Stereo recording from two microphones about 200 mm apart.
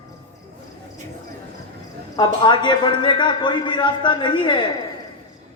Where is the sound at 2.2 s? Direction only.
20° left (ahead or behind).